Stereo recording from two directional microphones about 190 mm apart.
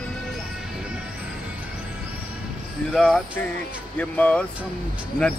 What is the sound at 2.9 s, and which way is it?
Speech, 5° left (ahead or behind).